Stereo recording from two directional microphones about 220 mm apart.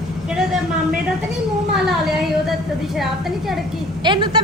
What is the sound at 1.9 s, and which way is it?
Speech, centre (ahead or behind).